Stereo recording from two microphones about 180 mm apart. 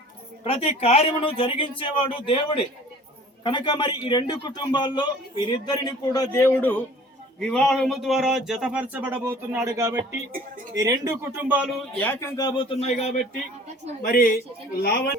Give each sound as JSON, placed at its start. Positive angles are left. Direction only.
{"t": 0.4, "sound": "a man's voice", "side_deg": 35}
{"t": 3.4, "sound": "a man's voice", "side_deg": 25}
{"t": 11.9, "sound": "a man's voice", "side_deg": 10}
{"t": 14.0, "sound": "a woman's voice", "side_deg": 50}